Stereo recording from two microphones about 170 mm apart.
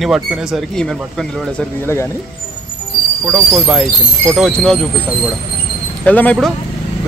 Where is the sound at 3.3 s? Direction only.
Centre (ahead or behind).